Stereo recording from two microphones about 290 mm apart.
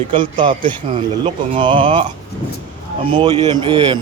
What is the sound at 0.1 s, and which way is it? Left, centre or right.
A man's voice, centre.